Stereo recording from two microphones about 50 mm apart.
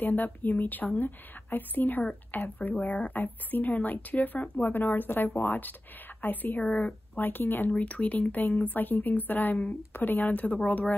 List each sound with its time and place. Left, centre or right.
0.0 s speech: left
7.2 s speech: left
7.8 s speech: left